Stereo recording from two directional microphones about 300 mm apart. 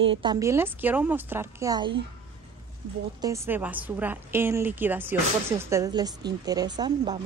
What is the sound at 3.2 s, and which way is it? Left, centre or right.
A woman's voice, centre.